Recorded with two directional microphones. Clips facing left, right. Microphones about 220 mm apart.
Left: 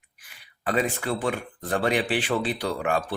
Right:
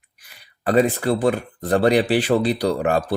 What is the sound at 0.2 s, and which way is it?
Speech, 40° right (ahead or behind).